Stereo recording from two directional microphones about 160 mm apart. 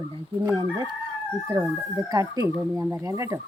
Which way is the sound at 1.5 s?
25° right (ahead or behind).